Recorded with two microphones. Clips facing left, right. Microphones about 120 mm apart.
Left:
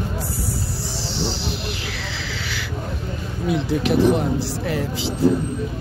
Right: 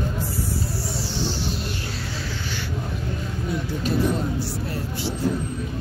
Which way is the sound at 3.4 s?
80° left.